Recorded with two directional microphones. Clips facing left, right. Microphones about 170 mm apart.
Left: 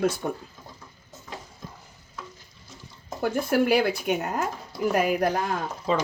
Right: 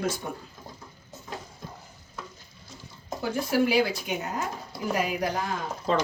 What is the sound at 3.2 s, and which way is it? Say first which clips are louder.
Speech: left 2 dB; 55° left (ahead or behind).